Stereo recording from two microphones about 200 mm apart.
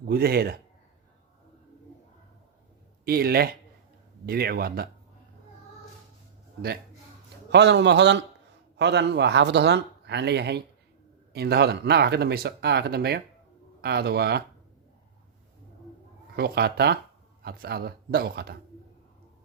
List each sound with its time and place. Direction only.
0.0 s speech: 50° right (ahead or behind)
3.0 s speech: 50° right (ahead or behind)
7.5 s speech: 60° right (ahead or behind)
16.3 s speech: 55° right (ahead or behind)